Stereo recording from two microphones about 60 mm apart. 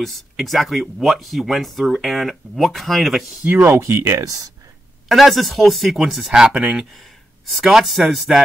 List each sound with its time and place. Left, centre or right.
0.0 s speech: centre
3.4 s speech: right
4.2 s speech: right
5.0 s speech: centre